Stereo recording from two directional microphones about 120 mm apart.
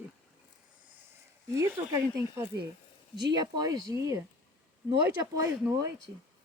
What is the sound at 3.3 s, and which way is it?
Speech, 35° right (ahead or behind).